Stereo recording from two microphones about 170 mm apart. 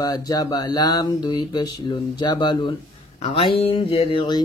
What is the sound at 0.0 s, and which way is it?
Mantra, 20° left (ahead or behind).